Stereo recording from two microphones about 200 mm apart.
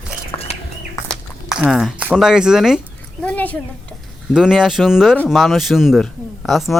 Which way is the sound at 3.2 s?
5° left (ahead or behind).